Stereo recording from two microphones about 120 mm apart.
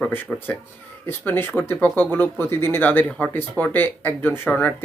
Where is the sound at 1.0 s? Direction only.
20° left (ahead or behind).